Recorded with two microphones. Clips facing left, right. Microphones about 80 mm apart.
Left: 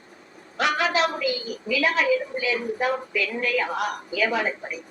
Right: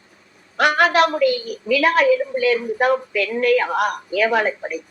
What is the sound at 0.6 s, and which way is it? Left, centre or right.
A woman's voice, right.